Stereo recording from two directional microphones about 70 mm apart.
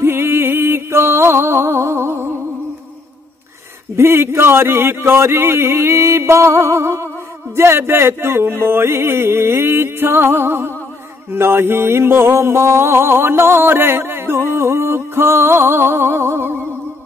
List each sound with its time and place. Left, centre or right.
0.0 s music: right
3.9 s a sound: right
14.5 s music: right